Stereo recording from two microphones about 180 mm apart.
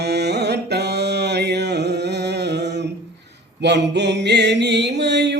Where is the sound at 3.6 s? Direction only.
70° right (ahead or behind).